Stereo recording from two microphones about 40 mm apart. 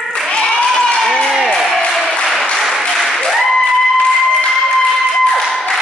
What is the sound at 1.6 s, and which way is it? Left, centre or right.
Applause, centre.